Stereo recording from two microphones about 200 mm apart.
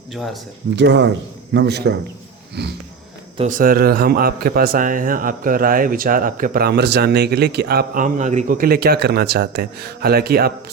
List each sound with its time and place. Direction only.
0.1 s speech: centre (ahead or behind)
0.8 s a man's voice: 60° right (ahead or behind)
3.3 s a man's voice: 40° right (ahead or behind)